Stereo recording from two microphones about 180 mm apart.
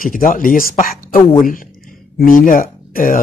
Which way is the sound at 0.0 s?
50° left (ahead or behind).